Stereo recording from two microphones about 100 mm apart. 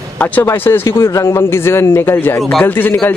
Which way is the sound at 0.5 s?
25° left (ahead or behind).